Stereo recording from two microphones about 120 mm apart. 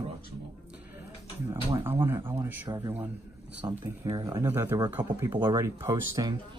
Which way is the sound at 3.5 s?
15° right (ahead or behind).